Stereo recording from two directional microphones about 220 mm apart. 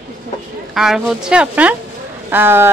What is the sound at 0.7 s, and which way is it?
A woman's voice, centre (ahead or behind).